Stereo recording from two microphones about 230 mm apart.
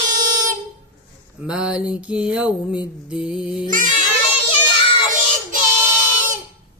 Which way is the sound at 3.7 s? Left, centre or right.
Right.